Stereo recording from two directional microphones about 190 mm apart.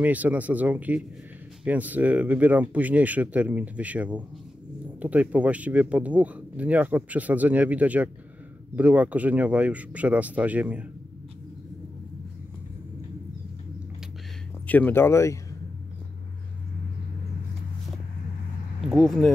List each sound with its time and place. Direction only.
0.0 s speech: 10° right (ahead or behind)
14.7 s speech: 10° left (ahead or behind)
18.9 s speech: centre (ahead or behind)